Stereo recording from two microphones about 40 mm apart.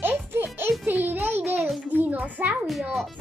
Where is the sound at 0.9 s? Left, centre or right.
Right.